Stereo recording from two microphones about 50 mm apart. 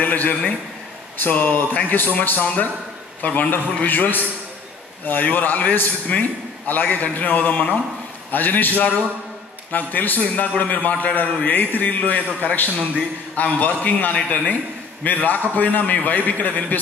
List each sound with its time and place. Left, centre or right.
0.0 s a man's voice: left